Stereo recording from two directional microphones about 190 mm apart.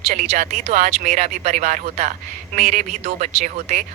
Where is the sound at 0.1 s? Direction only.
40° right (ahead or behind).